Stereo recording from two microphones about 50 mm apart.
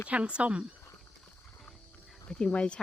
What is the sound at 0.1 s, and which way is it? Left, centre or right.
Speech, right.